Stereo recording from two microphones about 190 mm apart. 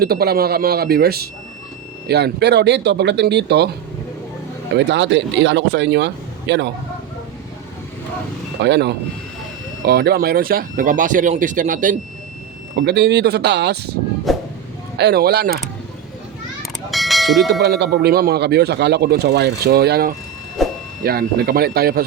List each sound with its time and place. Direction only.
0.0 s speech: 55° right (ahead or behind)
4.7 s speech: 65° right (ahead or behind)
8.6 s speech: 65° right (ahead or behind); by 11.9 s 45° right (ahead or behind)
12.7 s speech: 65° right (ahead or behind)
14.3 s a sound: centre (ahead or behind)
14.9 s speech: 55° right (ahead or behind)
16.9 s bell: centre (ahead or behind)
17.6 s speech: 60° right (ahead or behind)
20.6 s a sound: centre (ahead or behind)
21.0 s speech: 50° right (ahead or behind)